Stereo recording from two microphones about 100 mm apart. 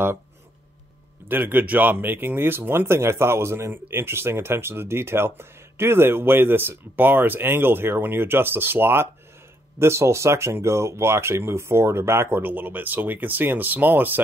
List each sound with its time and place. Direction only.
1.3 s speech: 20° right (ahead or behind)